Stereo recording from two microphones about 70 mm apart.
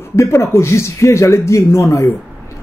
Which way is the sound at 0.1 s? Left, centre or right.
Left.